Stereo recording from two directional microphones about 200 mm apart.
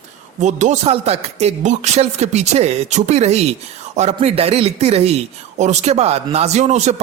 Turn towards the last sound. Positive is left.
turn(degrees=-35)  # may be behind; listen again after turning